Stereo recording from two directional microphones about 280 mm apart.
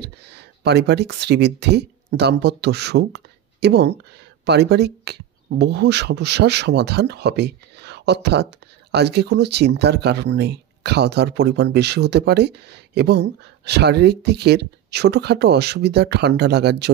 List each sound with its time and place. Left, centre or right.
0.0 s speech: right